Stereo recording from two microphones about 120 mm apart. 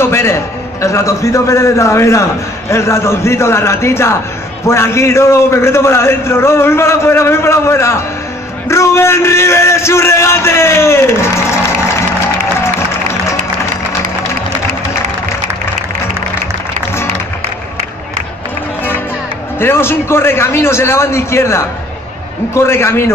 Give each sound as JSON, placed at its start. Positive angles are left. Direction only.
{"t": 0.0, "sound": "a man's voice", "side_deg": 20}
{"t": 19.6, "sound": "a man's voice", "side_deg": 20}